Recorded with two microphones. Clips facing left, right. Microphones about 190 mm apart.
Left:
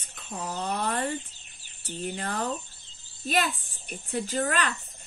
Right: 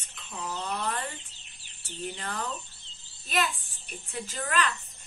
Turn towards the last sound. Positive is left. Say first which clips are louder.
# left 3 dB
turn(degrees=45)  # may be behind; listen again after turning